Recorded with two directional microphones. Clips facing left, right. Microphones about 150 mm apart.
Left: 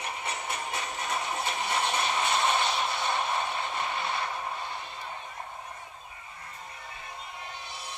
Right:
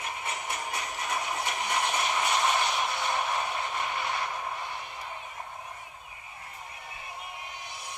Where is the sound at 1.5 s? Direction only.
15° right (ahead or behind).